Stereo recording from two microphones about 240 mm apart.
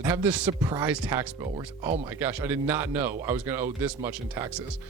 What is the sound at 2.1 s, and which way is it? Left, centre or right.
Speech, centre.